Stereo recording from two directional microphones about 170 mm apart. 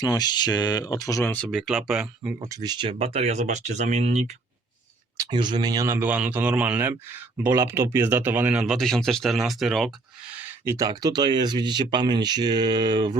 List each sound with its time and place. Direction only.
0.0 s speech: 25° left (ahead or behind)
1.2 s speech: 10° left (ahead or behind)
2.4 s speech: 20° right (ahead or behind); by 4.3 s 40° right (ahead or behind)
5.1 s speech: 20° right (ahead or behind); by 9.9 s centre (ahead or behind)
10.3 s speech: 10° right (ahead or behind)